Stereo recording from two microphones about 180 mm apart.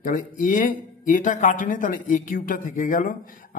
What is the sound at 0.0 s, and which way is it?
Speech, 45° left (ahead or behind).